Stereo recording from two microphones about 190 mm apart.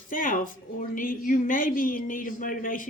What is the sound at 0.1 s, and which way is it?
Speech, 45° left (ahead or behind).